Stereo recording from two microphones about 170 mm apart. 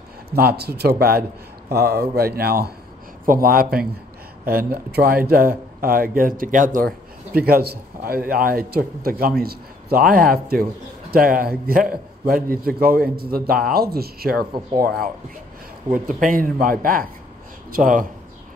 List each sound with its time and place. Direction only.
0.4 s speech: 65° right (ahead or behind)
7.3 s speech: 60° right (ahead or behind)
16.2 s speech: 55° right (ahead or behind)